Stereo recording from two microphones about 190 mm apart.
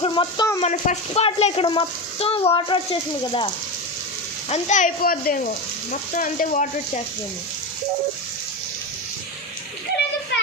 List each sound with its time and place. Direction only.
0.0 s speech: 25° left (ahead or behind)
0.6 s speech: 35° left (ahead or behind)